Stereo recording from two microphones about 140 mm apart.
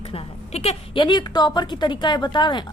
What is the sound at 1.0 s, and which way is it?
Speech, 30° left (ahead or behind).